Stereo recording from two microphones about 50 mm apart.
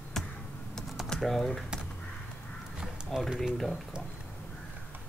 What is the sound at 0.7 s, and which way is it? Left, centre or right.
Typing, centre.